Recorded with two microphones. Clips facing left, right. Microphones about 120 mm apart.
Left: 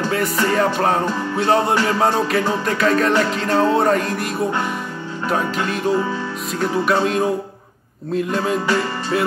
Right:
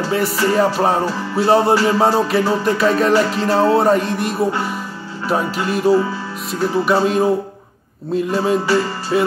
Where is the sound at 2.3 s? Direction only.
5° right (ahead or behind).